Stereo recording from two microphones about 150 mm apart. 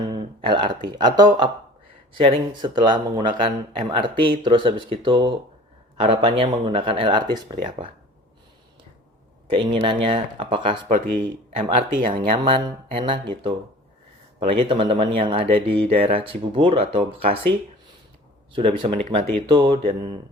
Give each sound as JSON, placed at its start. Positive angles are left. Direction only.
{"t": 0.1, "sound": "speech", "side_deg": -30}
{"t": 9.5, "sound": "speech", "side_deg": -35}
{"t": 18.5, "sound": "speech", "side_deg": -35}